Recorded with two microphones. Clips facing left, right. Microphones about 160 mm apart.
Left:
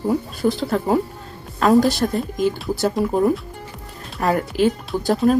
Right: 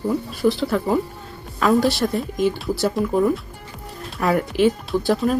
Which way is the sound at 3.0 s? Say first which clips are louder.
Left 1 dB; 30° left (ahead or behind).